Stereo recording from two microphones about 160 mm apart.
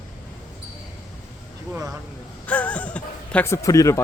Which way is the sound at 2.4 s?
10° left (ahead or behind).